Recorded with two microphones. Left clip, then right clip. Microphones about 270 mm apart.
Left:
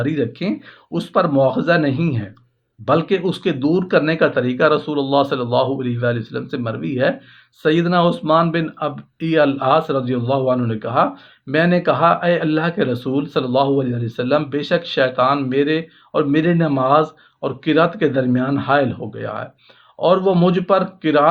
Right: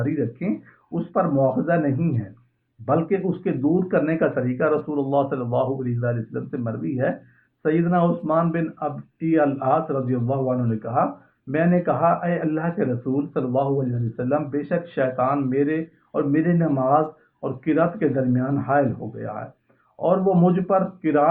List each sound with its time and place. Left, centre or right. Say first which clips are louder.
0.0 s speech: left 5 dB; left